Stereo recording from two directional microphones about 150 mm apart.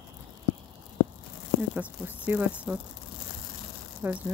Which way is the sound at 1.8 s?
10° right (ahead or behind).